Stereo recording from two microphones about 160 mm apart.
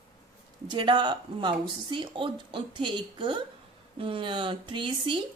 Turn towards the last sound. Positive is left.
turn(degrees=-30)  # may be behind; listen again after turning